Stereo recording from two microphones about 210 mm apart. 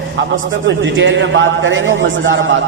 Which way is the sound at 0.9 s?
60° right (ahead or behind).